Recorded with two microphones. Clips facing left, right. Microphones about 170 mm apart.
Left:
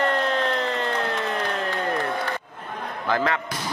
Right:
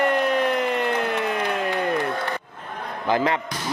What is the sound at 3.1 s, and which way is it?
Speech, 15° right (ahead or behind).